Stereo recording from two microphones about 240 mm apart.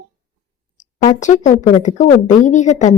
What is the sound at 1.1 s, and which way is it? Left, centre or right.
A woman's voice, left.